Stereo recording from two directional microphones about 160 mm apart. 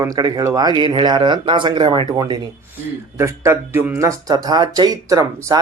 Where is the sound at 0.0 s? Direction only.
25° right (ahead or behind).